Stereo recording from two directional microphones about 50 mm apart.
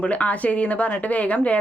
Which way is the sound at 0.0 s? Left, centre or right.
Left.